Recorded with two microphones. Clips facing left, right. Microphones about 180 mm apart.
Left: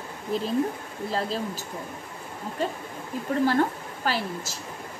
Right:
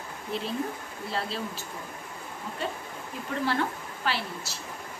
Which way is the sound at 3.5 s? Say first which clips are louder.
Left 5 dB; 45° left (ahead or behind).